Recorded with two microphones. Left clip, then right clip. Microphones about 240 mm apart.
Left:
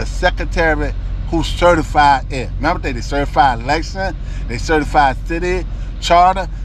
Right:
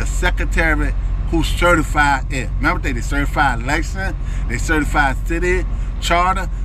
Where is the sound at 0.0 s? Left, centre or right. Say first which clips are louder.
Left 4 dB; centre.